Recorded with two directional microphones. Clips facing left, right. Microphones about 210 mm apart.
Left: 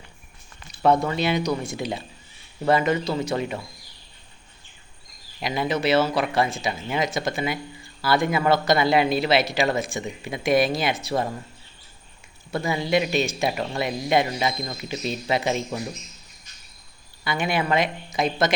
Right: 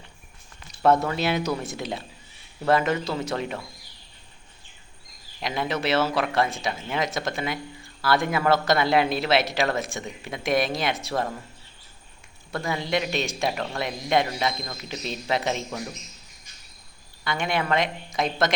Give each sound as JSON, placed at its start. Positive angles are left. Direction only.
{"t": 1.0, "sound": "a man's voice", "side_deg": 0}
{"t": 5.4, "sound": "a man's voice", "side_deg": 0}
{"t": 12.6, "sound": "a man's voice", "side_deg": 5}
{"t": 17.2, "sound": "a man's voice", "side_deg": 5}